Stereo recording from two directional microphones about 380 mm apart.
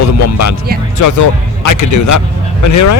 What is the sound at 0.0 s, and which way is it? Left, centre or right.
Speech, left.